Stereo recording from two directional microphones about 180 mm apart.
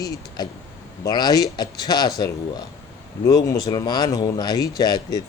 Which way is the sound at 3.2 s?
20° left (ahead or behind).